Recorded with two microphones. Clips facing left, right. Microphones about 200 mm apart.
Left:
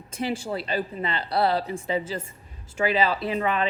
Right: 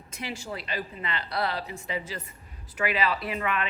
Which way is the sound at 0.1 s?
30° left (ahead or behind).